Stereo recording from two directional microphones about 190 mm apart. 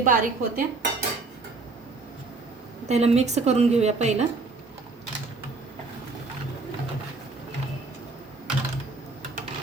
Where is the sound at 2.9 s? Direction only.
35° right (ahead or behind).